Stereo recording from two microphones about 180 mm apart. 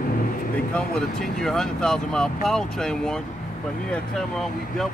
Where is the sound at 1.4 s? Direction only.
5° left (ahead or behind).